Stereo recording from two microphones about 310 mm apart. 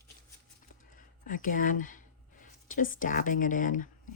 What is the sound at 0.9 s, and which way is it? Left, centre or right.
Speech, left.